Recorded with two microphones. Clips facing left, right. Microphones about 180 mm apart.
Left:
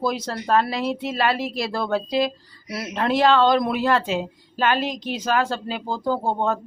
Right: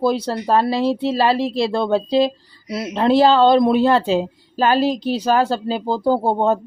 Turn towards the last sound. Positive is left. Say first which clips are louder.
# right 6 dB
turn(degrees=-35)  # may be behind; listen again after turning